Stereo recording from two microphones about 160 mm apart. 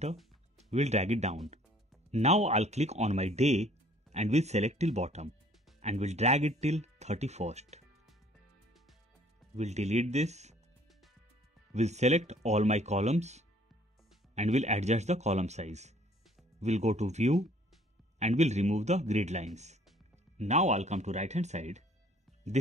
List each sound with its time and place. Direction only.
0.6 s speech: 45° right (ahead or behind)
9.6 s speech: 45° right (ahead or behind)
11.7 s speech: 45° right (ahead or behind)